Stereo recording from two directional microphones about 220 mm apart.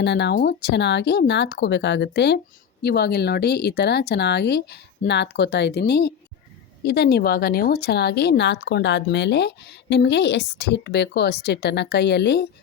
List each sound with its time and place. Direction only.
0.0 s speech: 50° left (ahead or behind)